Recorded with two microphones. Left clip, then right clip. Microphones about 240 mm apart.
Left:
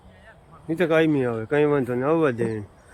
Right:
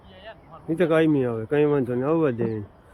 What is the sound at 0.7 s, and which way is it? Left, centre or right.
Speech, centre.